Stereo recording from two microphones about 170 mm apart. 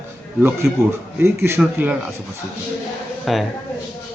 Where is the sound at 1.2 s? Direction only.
15° right (ahead or behind).